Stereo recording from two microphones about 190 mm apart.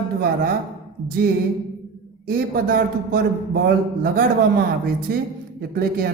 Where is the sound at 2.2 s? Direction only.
50° right (ahead or behind).